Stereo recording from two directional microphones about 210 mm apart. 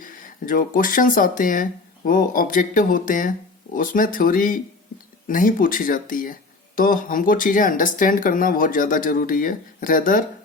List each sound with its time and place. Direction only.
0.0 s speech: 40° left (ahead or behind)